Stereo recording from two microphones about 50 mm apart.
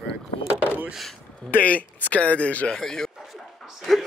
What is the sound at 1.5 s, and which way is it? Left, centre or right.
Speech, left.